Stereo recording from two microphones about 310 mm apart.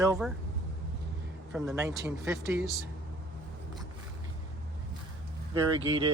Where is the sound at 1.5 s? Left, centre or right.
Centre.